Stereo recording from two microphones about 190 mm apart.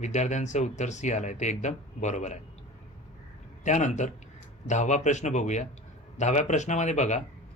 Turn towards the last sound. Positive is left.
turn(degrees=40)  # may be behind; listen again after turning